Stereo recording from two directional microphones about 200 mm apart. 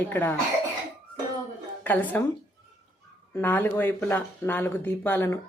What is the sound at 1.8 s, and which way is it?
Speech, 10° left (ahead or behind).